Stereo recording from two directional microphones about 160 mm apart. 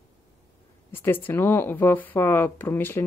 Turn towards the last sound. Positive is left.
turn(degrees=15)  # may be behind; listen again after turning